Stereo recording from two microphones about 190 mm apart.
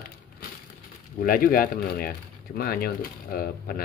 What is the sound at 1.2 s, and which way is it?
Speech, 50° left (ahead or behind).